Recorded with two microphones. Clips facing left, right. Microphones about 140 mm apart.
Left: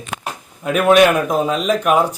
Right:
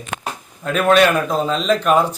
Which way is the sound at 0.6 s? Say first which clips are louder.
Left 2 dB; 10° left (ahead or behind).